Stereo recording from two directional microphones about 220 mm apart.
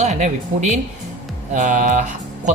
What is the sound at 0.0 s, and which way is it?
Speech, 35° right (ahead or behind).